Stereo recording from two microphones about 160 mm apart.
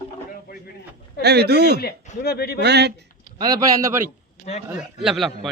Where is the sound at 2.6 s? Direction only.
90° right.